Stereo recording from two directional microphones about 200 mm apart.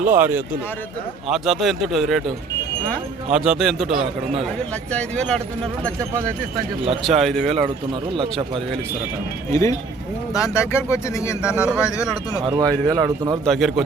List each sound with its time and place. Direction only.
0.0 s a man's voice: 10° right (ahead or behind)
3.3 s a man's voice: 5° right (ahead or behind)
3.8 s a man's voice: 30° right (ahead or behind)
4.9 s a man's voice: 5° left (ahead or behind)
7.2 s a man's voice: centre (ahead or behind)
7.4 s speech: 30° right (ahead or behind)
9.5 s speech: 15° left (ahead or behind)
11.4 s a man's voice: 5° right (ahead or behind)
11.8 s speech: 15° left (ahead or behind)
12.4 s a man's voice: 20° right (ahead or behind)
13.4 s a man's voice: centre (ahead or behind)